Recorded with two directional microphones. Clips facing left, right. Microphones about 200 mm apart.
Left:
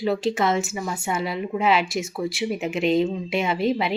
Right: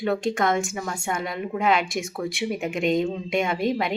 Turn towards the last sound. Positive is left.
turn(degrees=5)  # may be behind; listen again after turning